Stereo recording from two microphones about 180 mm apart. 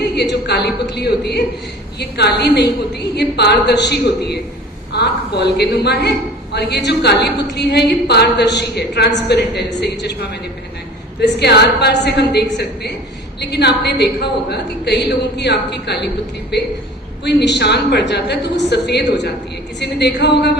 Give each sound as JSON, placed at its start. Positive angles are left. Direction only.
{"t": 0.2, "sound": "a woman's voice", "side_deg": 65}
{"t": 11.2, "sound": "a woman's voice", "side_deg": 70}